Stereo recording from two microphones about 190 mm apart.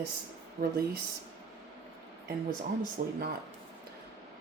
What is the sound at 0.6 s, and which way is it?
Speech, 55° right (ahead or behind).